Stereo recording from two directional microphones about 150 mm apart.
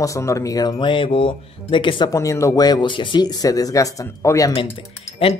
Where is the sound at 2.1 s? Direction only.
20° left (ahead or behind).